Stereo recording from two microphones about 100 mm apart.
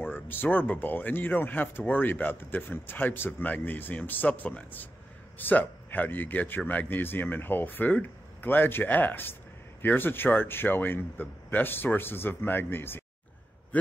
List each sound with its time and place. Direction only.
0.0 s speech: 20° left (ahead or behind)